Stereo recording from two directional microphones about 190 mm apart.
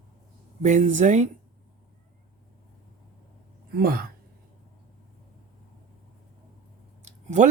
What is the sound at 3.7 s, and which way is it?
Speech, 50° right (ahead or behind).